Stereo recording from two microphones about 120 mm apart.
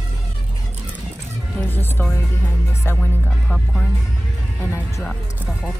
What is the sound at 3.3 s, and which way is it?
Music, 5° left (ahead or behind).